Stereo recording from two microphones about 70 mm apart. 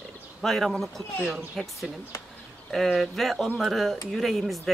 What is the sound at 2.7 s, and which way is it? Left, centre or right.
A woman's voice, centre.